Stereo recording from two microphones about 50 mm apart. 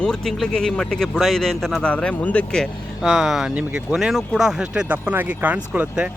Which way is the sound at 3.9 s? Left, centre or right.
Centre.